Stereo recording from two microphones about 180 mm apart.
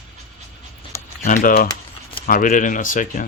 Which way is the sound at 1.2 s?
45° left (ahead or behind).